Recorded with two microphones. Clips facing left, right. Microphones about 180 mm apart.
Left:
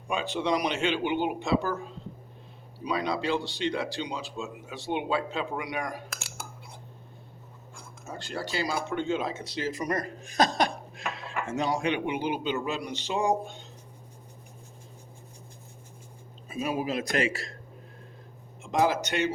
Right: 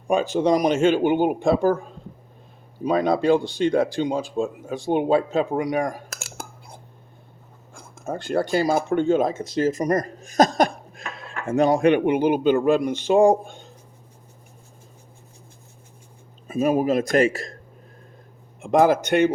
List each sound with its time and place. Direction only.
0.1 s speech: 45° right (ahead or behind)
7.7 s speech: 55° right (ahead or behind)
11.1 s dishes: 50° right (ahead or behind)
11.4 s speech: 55° right (ahead or behind)
16.5 s speech: 50° right (ahead or behind)
18.6 s speech: 55° right (ahead or behind)